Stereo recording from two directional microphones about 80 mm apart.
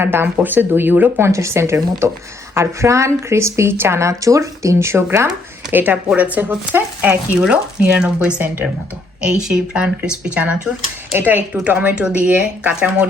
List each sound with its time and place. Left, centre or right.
0.0 s speech: right
1.3 s speech: right
5.7 s speech: right
7.1 s speech: centre